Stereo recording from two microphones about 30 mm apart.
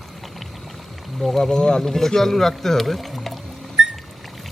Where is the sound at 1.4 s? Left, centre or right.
Left.